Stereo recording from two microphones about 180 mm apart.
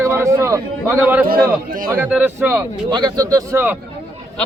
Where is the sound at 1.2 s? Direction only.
55° right (ahead or behind).